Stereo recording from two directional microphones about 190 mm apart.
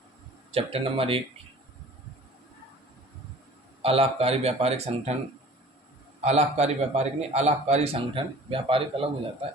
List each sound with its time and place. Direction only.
0.5 s speech: 30° right (ahead or behind)
3.8 s a man's voice: 30° right (ahead or behind)
6.2 s a man's voice: 35° right (ahead or behind)